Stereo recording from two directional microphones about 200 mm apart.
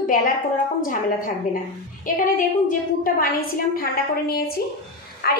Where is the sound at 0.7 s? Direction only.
45° left (ahead or behind).